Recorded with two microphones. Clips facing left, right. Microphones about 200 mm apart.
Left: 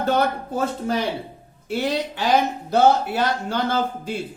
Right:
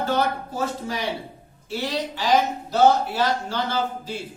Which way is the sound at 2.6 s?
55° left (ahead or behind).